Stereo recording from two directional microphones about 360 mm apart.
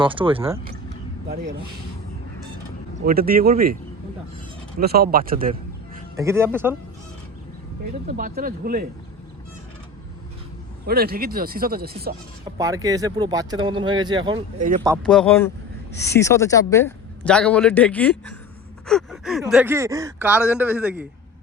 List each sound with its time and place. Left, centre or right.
0.0 s speech: centre
3.1 s speech: right
4.8 s a man's voice: right
6.1 s speech: centre
8.1 s speech: right
10.8 s speech: right
12.5 s speech: centre
15.0 s speech: centre